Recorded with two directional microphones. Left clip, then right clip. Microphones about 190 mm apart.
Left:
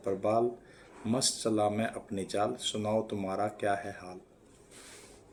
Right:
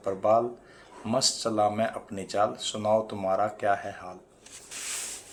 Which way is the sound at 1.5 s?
55° right (ahead or behind).